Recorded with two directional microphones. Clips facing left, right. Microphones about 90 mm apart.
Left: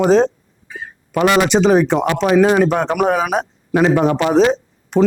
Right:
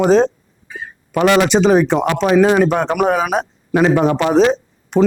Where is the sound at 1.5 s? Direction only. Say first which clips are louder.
Even; 15° right (ahead or behind).